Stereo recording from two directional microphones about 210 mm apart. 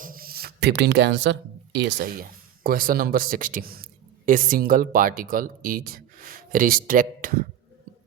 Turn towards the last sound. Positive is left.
turn(degrees=-40)  # may be behind; listen again after turning